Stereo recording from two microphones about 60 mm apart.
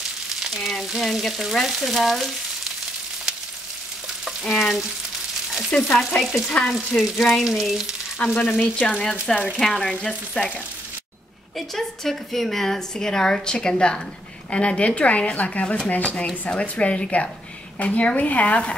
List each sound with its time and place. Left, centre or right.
0.6 s frying: centre
4.5 s frying: centre
5.9 s frying: centre
7.4 s frying: centre
8.2 s a woman's voice: left; by 10.5 s centre
11.5 s a woman's voice: centre; by 18.8 s left